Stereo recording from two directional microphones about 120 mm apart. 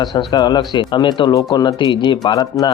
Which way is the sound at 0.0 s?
40° left (ahead or behind).